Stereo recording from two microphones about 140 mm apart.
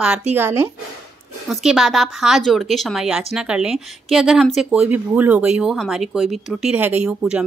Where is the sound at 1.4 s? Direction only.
Centre (ahead or behind).